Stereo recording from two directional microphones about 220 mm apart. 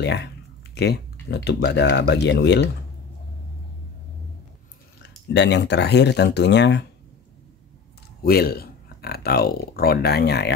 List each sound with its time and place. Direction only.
0.0 s speech: 50° left (ahead or behind)
5.3 s speech: 55° left (ahead or behind)
8.2 s speech: 45° left (ahead or behind)